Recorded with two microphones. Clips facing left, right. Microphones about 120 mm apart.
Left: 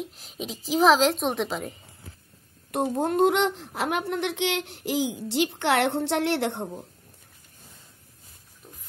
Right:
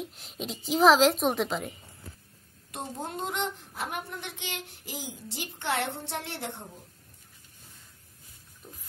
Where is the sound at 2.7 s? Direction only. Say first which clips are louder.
Left 12 dB; 60° left (ahead or behind); by 6.8 s 75° left (ahead or behind).